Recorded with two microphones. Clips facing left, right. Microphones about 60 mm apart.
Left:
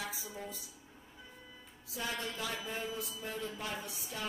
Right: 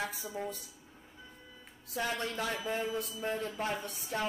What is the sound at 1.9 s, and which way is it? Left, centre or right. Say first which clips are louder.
A woman's voice: right 4 dB; right.